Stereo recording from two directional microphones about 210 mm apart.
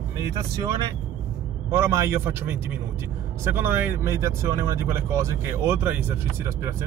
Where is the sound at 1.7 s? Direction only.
10° right (ahead or behind).